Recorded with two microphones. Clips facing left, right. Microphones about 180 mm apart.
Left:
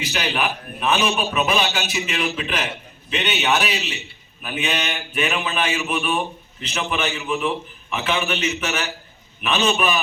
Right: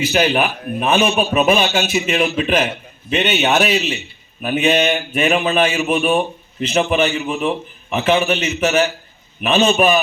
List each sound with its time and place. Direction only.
0.1 s a man's voice: 45° right (ahead or behind)